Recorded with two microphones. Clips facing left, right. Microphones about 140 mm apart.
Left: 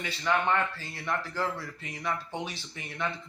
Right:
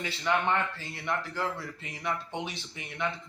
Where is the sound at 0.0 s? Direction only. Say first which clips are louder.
Even; 25° right (ahead or behind).